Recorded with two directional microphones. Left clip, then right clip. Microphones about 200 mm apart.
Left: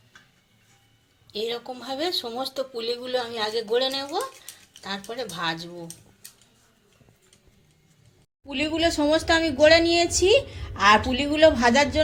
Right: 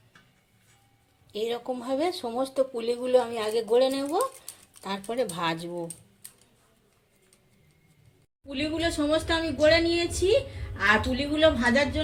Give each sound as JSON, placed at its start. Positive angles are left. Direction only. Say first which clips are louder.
{"t": 1.3, "sound": "speech", "louder": "even", "side_deg": -35}
{"t": 8.4, "sound": "speech", "louder": "left 5 dB", "side_deg": 40}